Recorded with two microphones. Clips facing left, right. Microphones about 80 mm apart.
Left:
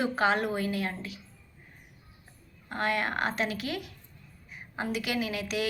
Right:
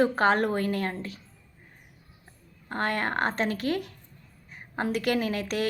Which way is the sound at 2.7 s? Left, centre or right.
Right.